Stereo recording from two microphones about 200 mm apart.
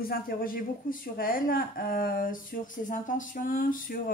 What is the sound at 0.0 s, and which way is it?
Speech, 45° left (ahead or behind).